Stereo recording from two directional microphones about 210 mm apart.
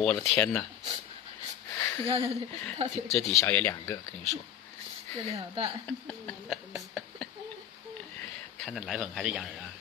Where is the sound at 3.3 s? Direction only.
10° left (ahead or behind).